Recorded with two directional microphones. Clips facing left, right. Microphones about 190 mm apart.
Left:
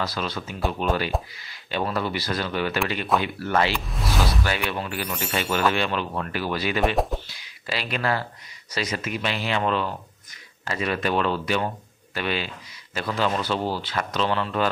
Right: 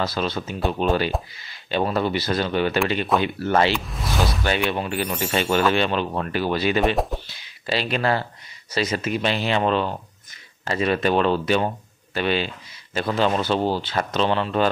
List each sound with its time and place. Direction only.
0.0 s speech: 25° right (ahead or behind)
3.7 s speech: centre (ahead or behind)
4.5 s speech: 25° right (ahead or behind)